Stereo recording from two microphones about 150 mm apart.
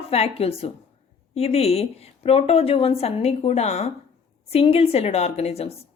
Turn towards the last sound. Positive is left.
turn(degrees=45)  # may be behind; listen again after turning